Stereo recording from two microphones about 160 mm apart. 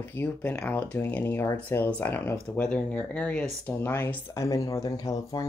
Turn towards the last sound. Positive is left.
turn(degrees=20)  # may be behind; listen again after turning